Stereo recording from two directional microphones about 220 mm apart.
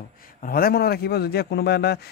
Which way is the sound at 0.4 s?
40° left (ahead or behind).